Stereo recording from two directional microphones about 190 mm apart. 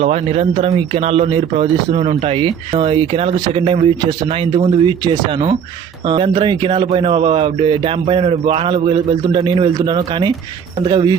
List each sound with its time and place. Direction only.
0.0 s speech: 35° right (ahead or behind)